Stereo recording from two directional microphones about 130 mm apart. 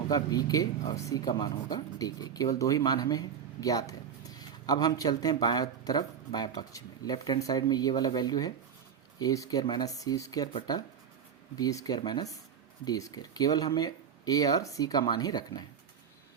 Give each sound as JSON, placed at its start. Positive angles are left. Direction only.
{"t": 0.1, "sound": "speech", "side_deg": 30}
{"t": 11.5, "sound": "speech", "side_deg": 30}